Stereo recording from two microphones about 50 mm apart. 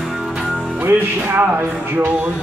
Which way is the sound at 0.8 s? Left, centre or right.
Right.